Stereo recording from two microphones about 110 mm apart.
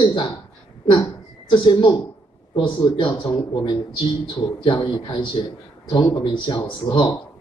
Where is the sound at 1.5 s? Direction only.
50° left (ahead or behind).